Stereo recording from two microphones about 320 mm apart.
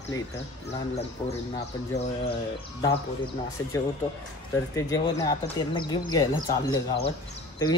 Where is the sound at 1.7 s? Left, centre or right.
Centre.